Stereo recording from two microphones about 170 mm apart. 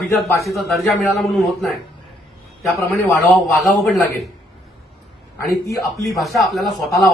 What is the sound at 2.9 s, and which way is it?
Speech, 10° left (ahead or behind).